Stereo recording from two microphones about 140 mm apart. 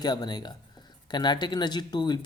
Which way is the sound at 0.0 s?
30° left (ahead or behind).